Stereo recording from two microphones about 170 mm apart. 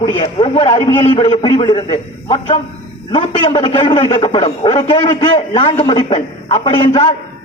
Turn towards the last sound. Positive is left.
turn(degrees=30)  # may be behind; listen again after turning